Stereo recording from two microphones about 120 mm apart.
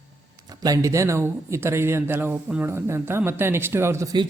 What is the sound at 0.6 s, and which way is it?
A man's voice, 30° right (ahead or behind).